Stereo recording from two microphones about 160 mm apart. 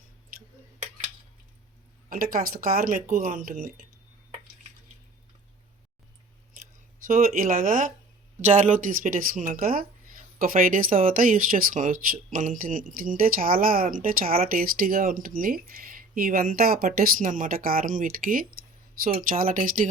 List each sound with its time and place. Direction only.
2.0 s speech: 65° right (ahead or behind)
7.1 s speech: 60° right (ahead or behind)